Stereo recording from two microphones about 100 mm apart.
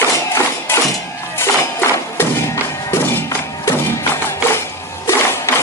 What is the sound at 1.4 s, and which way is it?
Music, 25° left (ahead or behind).